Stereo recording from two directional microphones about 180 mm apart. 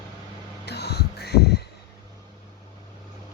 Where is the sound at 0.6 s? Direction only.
65° left (ahead or behind).